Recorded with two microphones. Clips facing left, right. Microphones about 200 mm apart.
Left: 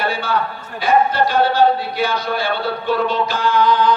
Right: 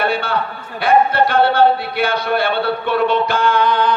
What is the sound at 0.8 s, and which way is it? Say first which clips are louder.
Speech: right 2 dB; 60° right (ahead or behind).